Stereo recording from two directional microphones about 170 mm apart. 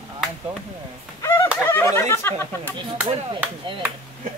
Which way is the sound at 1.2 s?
15° left (ahead or behind).